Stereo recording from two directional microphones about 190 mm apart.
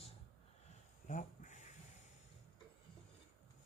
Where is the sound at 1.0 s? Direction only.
45° left (ahead or behind).